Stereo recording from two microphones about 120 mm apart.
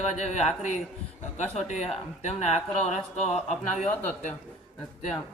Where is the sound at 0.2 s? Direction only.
65° left (ahead or behind).